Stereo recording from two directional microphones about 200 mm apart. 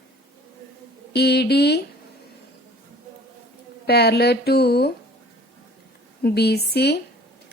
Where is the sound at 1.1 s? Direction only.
55° left (ahead or behind).